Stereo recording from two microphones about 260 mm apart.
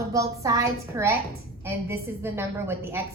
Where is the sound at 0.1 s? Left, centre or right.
Centre.